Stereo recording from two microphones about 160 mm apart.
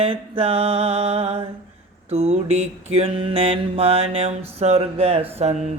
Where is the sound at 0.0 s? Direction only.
35° right (ahead or behind).